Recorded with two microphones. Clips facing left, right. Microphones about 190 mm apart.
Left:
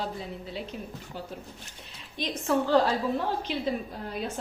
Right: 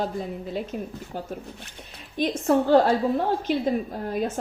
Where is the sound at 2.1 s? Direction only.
45° right (ahead or behind).